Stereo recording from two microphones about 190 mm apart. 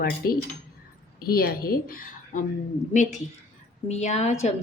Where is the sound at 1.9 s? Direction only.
45° left (ahead or behind).